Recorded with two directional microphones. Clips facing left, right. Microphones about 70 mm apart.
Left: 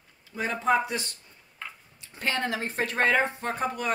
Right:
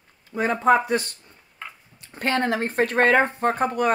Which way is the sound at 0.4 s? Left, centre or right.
Right.